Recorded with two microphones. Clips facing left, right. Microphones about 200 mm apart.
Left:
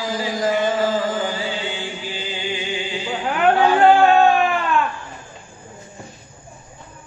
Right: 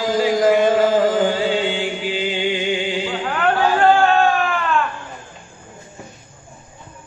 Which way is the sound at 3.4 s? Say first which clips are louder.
Left 2 dB; 15° left (ahead or behind).